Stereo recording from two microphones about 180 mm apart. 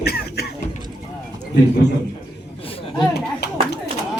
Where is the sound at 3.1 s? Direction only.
65° left (ahead or behind).